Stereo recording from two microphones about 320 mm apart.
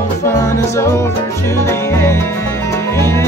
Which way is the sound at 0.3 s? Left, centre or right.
Centre.